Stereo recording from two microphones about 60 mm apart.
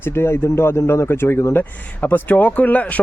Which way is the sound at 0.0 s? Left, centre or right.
Left.